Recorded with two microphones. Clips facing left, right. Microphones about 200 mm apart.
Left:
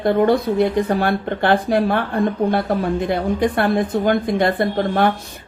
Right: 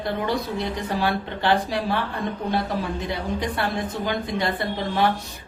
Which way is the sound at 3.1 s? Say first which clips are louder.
Left 9 dB; 55° left (ahead or behind).